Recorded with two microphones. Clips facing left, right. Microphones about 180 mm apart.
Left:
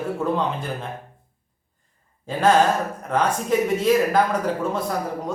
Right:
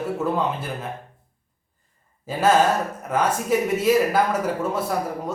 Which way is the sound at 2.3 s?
5° right (ahead or behind).